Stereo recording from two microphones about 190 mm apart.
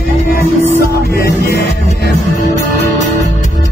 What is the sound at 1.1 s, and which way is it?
Music, 55° left (ahead or behind).